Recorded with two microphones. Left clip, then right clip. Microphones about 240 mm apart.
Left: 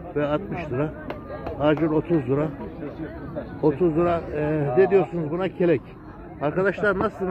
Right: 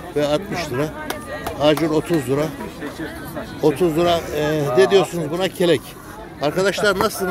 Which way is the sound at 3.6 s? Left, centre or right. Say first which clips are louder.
Right 4 dB; right.